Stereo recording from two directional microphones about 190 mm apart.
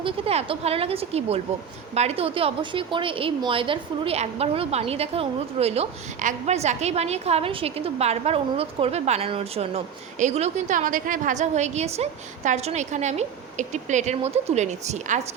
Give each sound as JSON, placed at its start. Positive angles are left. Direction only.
{"t": 0.0, "sound": "a woman's voice", "side_deg": -30}